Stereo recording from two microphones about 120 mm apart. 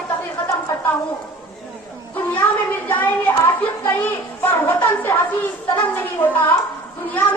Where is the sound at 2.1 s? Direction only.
15° left (ahead or behind).